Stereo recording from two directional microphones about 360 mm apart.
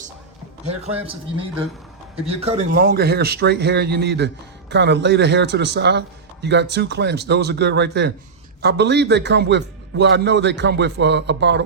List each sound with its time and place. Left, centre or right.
1.0 s a man's voice: centre